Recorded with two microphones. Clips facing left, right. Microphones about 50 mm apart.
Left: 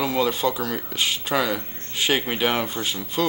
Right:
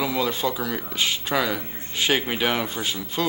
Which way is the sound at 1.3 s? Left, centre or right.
Centre.